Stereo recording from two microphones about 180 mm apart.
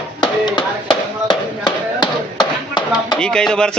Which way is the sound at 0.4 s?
25° left (ahead or behind).